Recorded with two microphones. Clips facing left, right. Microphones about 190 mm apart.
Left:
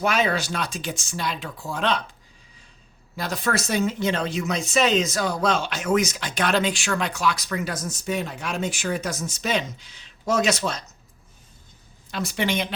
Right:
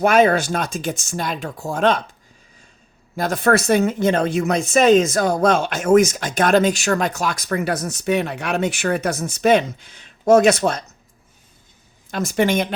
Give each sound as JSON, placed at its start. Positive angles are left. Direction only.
{"t": 0.0, "sound": "speech", "side_deg": -50}
{"t": 3.2, "sound": "speech", "side_deg": -50}
{"t": 12.1, "sound": "speech", "side_deg": -45}